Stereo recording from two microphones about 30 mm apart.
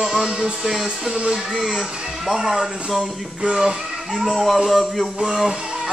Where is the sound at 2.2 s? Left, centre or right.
Centre.